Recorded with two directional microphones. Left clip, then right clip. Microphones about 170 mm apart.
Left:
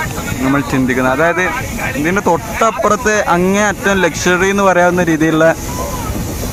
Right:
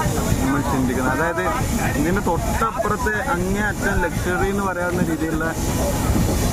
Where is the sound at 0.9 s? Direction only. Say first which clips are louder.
Left 11 dB; 35° left (ahead or behind).